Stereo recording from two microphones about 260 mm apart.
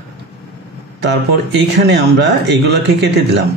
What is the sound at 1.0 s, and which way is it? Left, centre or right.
A man's voice, right.